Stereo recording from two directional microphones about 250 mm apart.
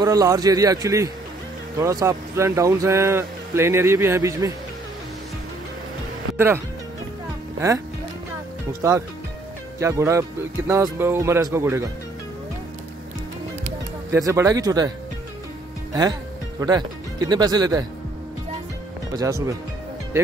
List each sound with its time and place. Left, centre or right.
0.0 s speech: centre
6.3 s speech: centre
9.8 s speech: centre
14.2 s speech: centre
15.9 s speech: centre
17.3 s speech: centre
19.1 s speech: centre